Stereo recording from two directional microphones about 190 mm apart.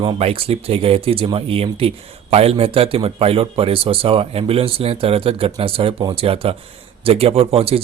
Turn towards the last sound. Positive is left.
turn(degrees=-30)  # may be behind; listen again after turning